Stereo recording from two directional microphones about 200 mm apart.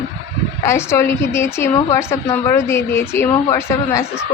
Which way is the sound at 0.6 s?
15° left (ahead or behind).